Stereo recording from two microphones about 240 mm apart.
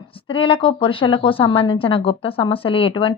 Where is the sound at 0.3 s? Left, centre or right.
Left.